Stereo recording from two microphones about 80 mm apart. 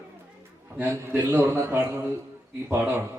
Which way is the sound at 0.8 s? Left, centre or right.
Right.